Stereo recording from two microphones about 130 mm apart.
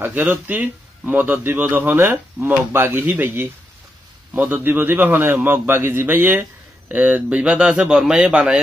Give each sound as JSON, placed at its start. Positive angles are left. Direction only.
{"t": 0.0, "sound": "speech", "side_deg": -15}